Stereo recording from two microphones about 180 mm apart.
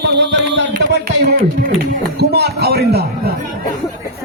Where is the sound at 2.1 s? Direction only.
65° right (ahead or behind).